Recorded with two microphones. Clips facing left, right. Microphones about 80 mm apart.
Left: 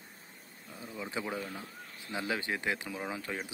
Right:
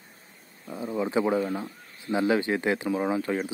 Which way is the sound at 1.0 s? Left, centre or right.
Right.